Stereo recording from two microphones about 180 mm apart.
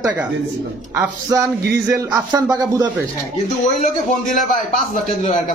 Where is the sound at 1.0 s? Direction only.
15° right (ahead or behind).